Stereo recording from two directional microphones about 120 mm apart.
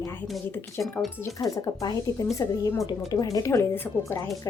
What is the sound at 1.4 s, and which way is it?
A woman's voice, 35° left (ahead or behind).